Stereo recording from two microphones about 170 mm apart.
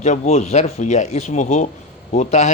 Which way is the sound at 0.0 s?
40° left (ahead or behind).